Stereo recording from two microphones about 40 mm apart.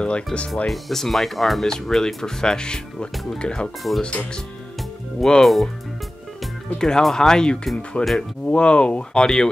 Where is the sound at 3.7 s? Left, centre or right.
Centre.